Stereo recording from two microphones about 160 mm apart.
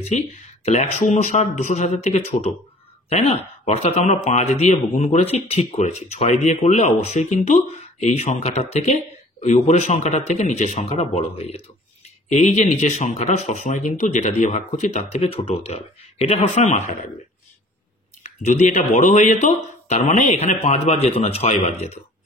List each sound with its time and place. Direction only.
0.1 s speech: 45° left (ahead or behind)
18.2 s speech: 45° left (ahead or behind)